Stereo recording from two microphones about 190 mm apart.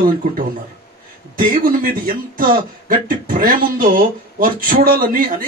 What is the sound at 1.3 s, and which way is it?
A man's voice, 50° right (ahead or behind).